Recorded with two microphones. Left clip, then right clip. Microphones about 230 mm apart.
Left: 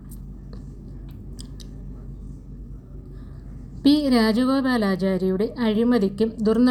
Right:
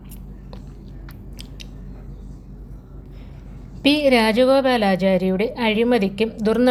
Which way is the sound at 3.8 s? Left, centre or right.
Centre.